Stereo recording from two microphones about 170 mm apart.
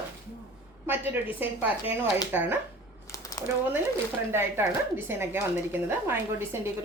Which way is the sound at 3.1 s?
20° left (ahead or behind).